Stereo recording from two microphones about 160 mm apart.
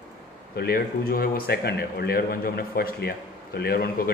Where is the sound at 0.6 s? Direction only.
70° left (ahead or behind).